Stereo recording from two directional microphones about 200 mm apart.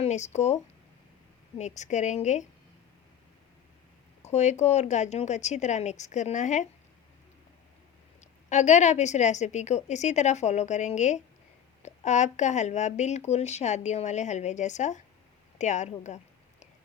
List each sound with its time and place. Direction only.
0.0 s speech: 35° left (ahead or behind)
4.2 s speech: 35° left (ahead or behind)
8.2 s speech: 35° left (ahead or behind)
15.5 s a sound: 35° left (ahead or behind)